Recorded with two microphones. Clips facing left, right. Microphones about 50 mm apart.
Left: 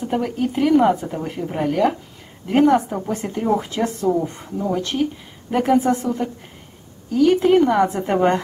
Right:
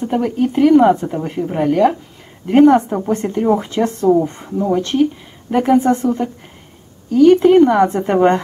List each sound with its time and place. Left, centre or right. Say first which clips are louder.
0.0 s speech: right 5 dB; centre
3.4 s speech: right 4 dB; centre
3.7 s speech: right 5 dB; centre
4.5 s speech: right 6 dB; centre
5.5 s speech: right 4 dB; centre
6.0 s speech: right 5 dB; centre